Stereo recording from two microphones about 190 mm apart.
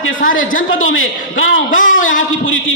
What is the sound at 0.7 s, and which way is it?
Speech, 90° left.